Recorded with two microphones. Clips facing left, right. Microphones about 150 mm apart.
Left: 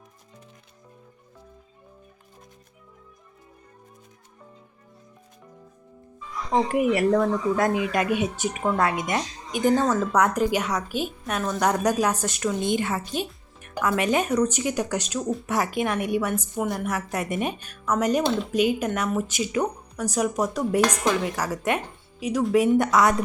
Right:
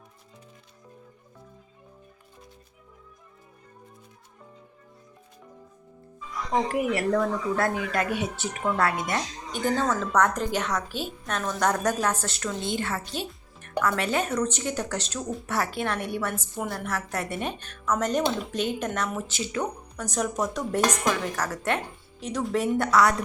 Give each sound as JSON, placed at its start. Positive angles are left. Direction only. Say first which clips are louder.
{"t": 6.5, "sound": "a woman's voice", "louder": "left 4 dB", "side_deg": 20}